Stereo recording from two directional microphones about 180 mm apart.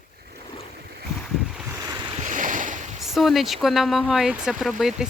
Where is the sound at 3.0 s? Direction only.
Centre (ahead or behind).